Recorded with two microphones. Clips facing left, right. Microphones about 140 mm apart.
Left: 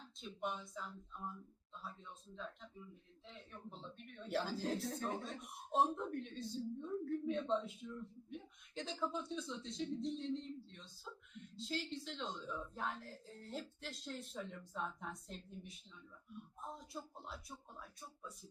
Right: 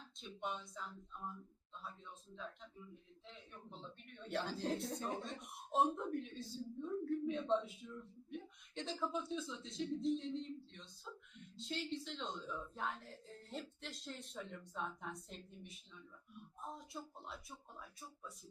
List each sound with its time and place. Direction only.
0.2 s speech: centre (ahead or behind)